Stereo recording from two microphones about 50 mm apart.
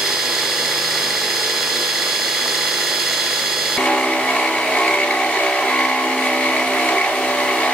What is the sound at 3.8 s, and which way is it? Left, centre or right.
Vehicle, left.